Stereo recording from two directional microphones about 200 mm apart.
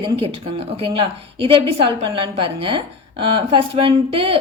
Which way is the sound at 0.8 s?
25° right (ahead or behind).